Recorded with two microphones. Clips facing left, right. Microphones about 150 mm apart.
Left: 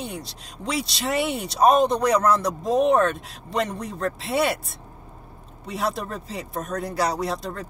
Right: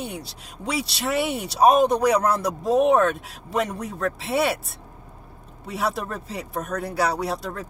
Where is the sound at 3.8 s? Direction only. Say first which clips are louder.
Right 1 dB; 65° right (ahead or behind).